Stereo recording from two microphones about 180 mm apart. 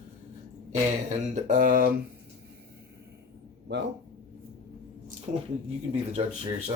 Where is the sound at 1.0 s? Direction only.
45° right (ahead or behind).